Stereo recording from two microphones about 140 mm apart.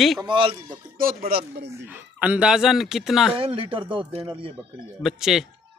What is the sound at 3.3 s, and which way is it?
Speech, 40° right (ahead or behind).